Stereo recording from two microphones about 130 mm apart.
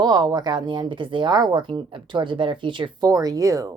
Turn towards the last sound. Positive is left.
turn(degrees=-25)  # may be behind; listen again after turning